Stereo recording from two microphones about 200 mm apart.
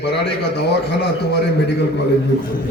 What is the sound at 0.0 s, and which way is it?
A man's voice, 60° left (ahead or behind).